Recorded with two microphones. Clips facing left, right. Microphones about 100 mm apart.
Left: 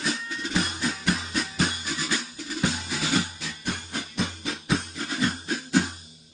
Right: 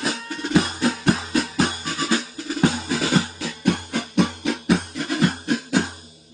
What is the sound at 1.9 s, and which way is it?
Music, 75° right (ahead or behind).